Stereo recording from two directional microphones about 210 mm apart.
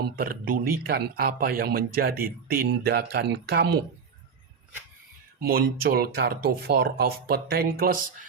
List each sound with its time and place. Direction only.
0.0 s a man's voice: 45° right (ahead or behind)
5.4 s a man's voice: 45° right (ahead or behind)